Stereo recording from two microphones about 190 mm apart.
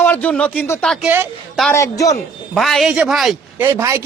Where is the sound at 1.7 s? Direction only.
15° left (ahead or behind).